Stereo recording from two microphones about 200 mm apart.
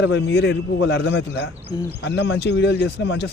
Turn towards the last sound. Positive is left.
turn(degrees=55)  # may be behind; listen again after turning